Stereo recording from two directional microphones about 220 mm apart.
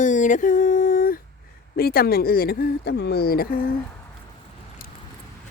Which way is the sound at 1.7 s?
45° left (ahead or behind).